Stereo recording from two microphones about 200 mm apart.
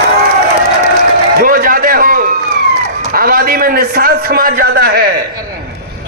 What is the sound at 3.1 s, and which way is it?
A man's voice, 45° right (ahead or behind).